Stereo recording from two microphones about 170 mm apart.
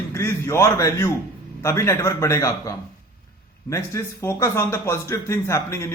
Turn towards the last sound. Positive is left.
turn(degrees=20)  # may be behind; listen again after turning